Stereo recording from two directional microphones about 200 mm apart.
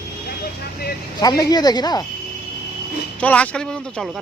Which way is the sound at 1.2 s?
20° left (ahead or behind).